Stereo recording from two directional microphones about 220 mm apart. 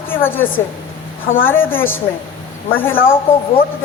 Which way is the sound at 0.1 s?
10° left (ahead or behind).